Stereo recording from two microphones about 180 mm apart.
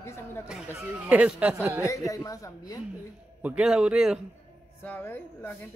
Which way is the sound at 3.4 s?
5° right (ahead or behind).